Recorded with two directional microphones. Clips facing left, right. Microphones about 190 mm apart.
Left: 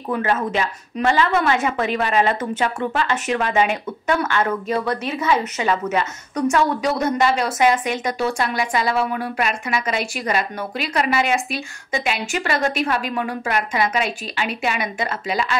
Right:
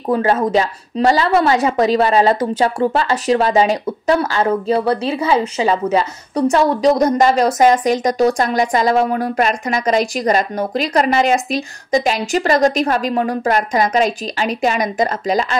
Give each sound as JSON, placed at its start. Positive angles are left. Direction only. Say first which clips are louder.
{"t": 0.1, "sound": "a woman's voice", "louder": "right 6 dB", "side_deg": -35}